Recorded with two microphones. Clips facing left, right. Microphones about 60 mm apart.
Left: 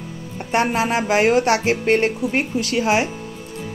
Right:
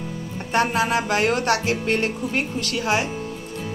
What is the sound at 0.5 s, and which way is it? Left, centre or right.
Speech, left.